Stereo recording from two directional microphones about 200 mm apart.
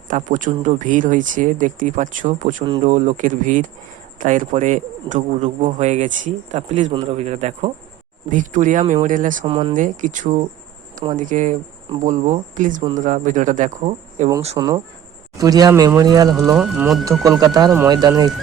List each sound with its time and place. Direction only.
0.1 s a man's voice: 40° right (ahead or behind)
9.4 s speech: 25° right (ahead or behind)
9.7 s a man's voice: 40° right (ahead or behind)
14.5 s speech: 15° right (ahead or behind)
16.6 s speech: 5° right (ahead or behind)
17.1 s speech: 15° right (ahead or behind)